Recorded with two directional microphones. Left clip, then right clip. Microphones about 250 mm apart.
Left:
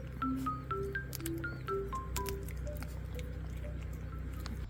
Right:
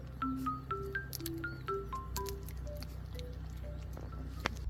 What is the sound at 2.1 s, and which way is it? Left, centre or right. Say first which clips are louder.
Music: left 2 dB; centre.